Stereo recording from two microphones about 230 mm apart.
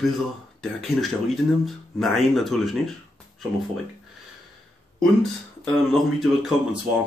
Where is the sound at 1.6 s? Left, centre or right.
Centre.